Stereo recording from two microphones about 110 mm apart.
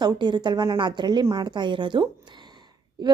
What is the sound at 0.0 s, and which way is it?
A woman's voice, 40° right (ahead or behind).